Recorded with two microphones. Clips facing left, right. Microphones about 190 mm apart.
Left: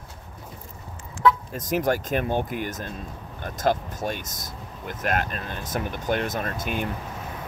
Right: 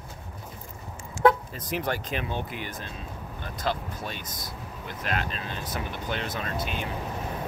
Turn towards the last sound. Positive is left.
turn(degrees=50)  # may be behind; listen again after turning